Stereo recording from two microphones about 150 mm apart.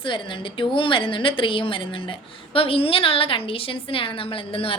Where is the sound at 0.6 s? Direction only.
35° left (ahead or behind).